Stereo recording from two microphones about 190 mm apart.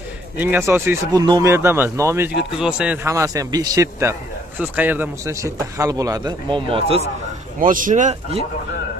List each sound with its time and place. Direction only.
0.4 s a man's voice: 10° right (ahead or behind); by 7.0 s 25° right (ahead or behind)
7.6 s speech: 45° right (ahead or behind)